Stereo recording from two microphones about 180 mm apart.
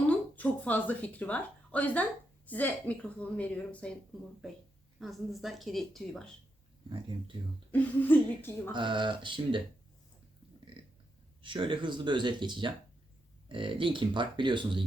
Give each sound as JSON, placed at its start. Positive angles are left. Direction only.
{"t": 0.1, "sound": "a woman's voice", "side_deg": 10}
{"t": 4.9, "sound": "a woman's voice", "side_deg": 0}
{"t": 7.7, "sound": "a woman's voice", "side_deg": 10}
{"t": 8.7, "sound": "speech", "side_deg": -25}
{"t": 11.4, "sound": "speech", "side_deg": -30}